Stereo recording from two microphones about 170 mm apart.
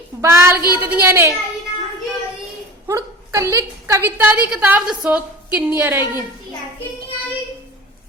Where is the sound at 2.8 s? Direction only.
20° right (ahead or behind).